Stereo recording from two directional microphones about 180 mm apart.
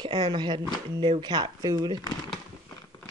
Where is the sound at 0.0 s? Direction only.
25° right (ahead or behind).